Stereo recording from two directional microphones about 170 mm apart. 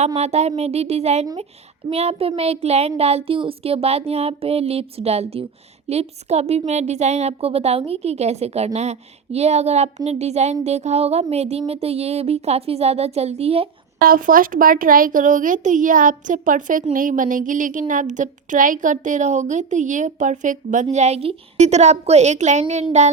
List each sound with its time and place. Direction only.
0.2 s a woman's voice: 40° right (ahead or behind)
14.0 s a woman's voice: 55° right (ahead or behind)